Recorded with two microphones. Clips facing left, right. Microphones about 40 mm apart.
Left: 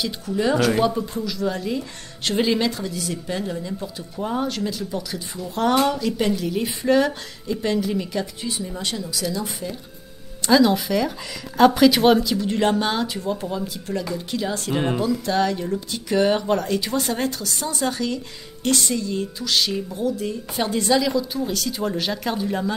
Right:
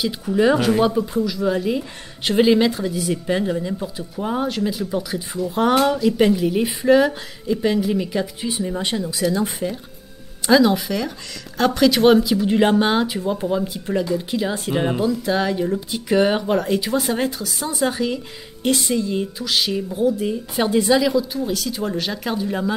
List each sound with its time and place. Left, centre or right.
0.0 s speech: centre
10.4 s speech: centre